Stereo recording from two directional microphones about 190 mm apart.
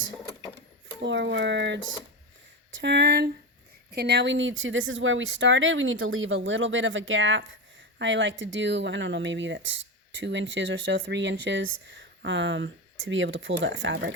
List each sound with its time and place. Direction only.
1.0 s speech: 70° right (ahead or behind)
2.8 s speech: 65° right (ahead or behind)